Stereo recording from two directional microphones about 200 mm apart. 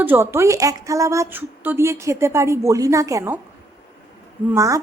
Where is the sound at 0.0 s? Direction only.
10° right (ahead or behind).